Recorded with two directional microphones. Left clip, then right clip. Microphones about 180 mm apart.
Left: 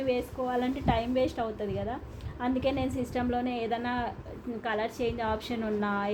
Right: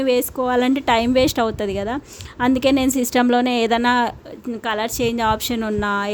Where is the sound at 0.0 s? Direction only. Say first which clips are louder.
Right 11 dB; 65° right (ahead or behind).